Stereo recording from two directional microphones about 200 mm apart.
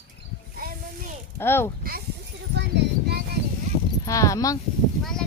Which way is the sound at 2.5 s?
60° right (ahead or behind).